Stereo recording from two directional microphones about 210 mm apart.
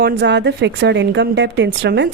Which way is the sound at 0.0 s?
55° right (ahead or behind).